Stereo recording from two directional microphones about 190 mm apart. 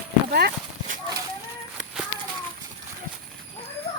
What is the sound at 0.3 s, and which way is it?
Clip-clop, 55° right (ahead or behind).